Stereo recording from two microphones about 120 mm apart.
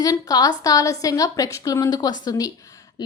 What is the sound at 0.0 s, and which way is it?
A woman's voice, 30° left (ahead or behind).